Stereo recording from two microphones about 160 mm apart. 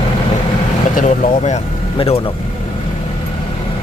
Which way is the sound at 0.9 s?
50° left (ahead or behind).